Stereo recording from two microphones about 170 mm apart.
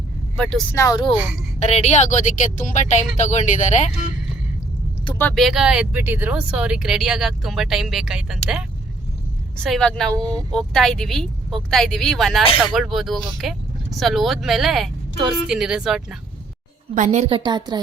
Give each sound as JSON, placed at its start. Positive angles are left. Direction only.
{"t": 0.3, "sound": "speech", "side_deg": 5}
{"t": 0.8, "sound": "speech", "side_deg": 20}
{"t": 1.5, "sound": "a woman's voice", "side_deg": 40}
{"t": 5.3, "sound": "speech", "side_deg": 0}
{"t": 9.6, "sound": "speech", "side_deg": 0}
{"t": 16.9, "sound": "a woman's voice", "side_deg": -45}